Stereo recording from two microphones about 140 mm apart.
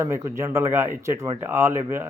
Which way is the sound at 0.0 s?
20° right (ahead or behind).